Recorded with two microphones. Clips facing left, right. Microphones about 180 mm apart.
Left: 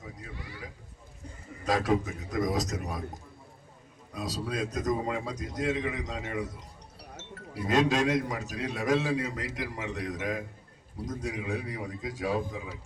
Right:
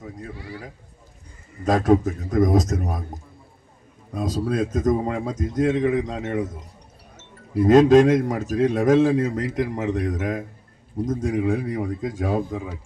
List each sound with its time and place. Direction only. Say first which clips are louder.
1.6 s a man's voice: right 9 dB; 50° right (ahead or behind)
4.1 s a man's voice: right 9 dB; 50° right (ahead or behind)
7.6 s a man's voice: right 12 dB; 50° right (ahead or behind)